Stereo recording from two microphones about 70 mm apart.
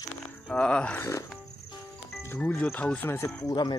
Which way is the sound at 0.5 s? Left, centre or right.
Centre.